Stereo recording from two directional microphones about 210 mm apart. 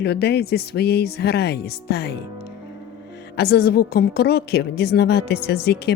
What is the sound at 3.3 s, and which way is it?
A woman's voice, 50° left (ahead or behind).